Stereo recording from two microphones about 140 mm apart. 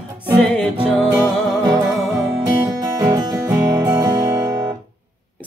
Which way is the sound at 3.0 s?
30° right (ahead or behind).